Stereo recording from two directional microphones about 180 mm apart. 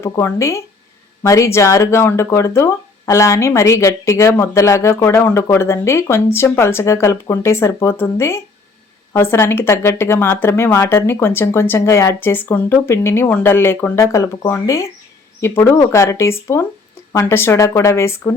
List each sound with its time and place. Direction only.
0.0 s speech: 15° left (ahead or behind)